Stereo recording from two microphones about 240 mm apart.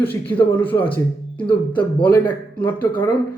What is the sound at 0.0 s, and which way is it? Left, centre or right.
Speech, centre.